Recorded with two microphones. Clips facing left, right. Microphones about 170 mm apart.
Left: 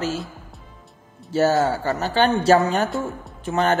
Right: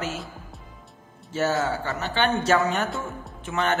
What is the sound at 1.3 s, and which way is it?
A man's voice, 40° left (ahead or behind).